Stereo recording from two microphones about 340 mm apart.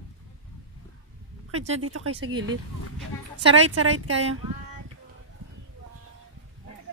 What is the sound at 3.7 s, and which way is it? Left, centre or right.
Speech, right.